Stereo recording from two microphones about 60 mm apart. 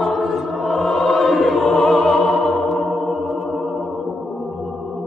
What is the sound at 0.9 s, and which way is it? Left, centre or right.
Music, centre.